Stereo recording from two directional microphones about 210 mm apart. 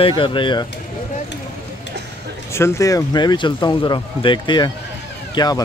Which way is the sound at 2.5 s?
15° left (ahead or behind).